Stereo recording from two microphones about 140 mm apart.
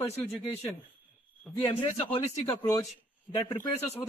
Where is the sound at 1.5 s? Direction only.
5° left (ahead or behind).